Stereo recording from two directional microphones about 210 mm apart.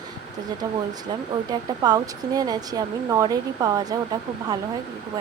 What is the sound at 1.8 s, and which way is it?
Speech, 20° right (ahead or behind).